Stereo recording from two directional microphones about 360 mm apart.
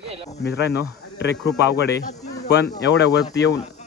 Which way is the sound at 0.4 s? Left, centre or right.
Left.